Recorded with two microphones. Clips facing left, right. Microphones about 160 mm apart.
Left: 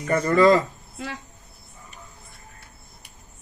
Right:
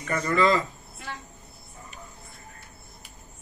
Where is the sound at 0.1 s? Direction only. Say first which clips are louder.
Left 6 dB; 35° left (ahead or behind).